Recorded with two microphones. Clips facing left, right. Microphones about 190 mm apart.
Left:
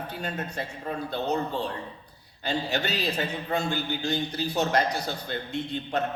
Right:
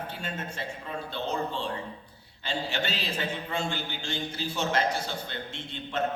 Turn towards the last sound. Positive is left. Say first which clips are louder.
# left 6 dB
turn(degrees=40)  # may be behind; listen again after turning